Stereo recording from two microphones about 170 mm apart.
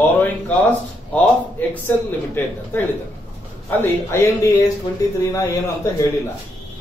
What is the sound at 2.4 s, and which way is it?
A man's voice, 10° left (ahead or behind).